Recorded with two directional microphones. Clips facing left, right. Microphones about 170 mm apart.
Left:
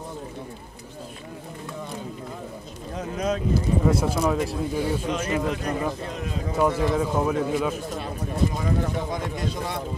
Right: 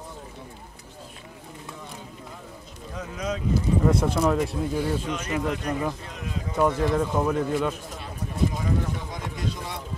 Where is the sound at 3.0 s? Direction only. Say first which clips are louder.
Left 5 dB; 55° left (ahead or behind).